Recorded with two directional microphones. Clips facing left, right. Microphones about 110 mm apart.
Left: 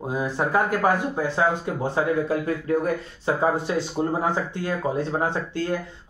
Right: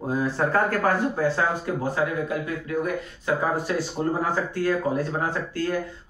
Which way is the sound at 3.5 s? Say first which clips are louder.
Left 1 dB; 20° left (ahead or behind).